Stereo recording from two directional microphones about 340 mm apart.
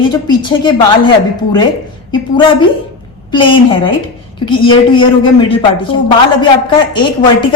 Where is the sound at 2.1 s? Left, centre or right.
Centre.